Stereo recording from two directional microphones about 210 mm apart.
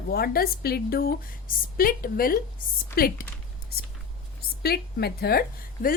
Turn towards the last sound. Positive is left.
turn(degrees=45)  # may be behind; listen again after turning